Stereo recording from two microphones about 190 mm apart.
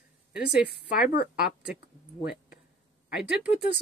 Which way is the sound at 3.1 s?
5° right (ahead or behind).